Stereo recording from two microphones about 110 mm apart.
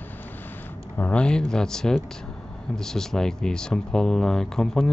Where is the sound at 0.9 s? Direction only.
10° left (ahead or behind).